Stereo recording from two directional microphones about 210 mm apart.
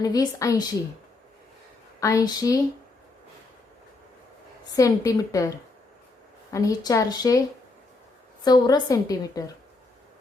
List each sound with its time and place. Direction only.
0.0 s speech: 15° left (ahead or behind)
2.0 s speech: 15° left (ahead or behind)
4.7 s speech: 15° left (ahead or behind)
8.4 s speech: 20° left (ahead or behind)